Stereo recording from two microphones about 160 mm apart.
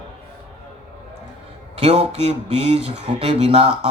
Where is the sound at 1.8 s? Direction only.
40° right (ahead or behind).